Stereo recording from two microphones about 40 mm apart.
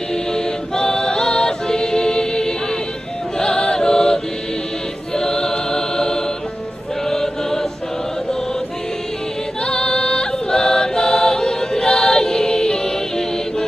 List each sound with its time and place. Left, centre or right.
0.1 s a capella: centre
3.3 s choir: centre
9.6 s choir: centre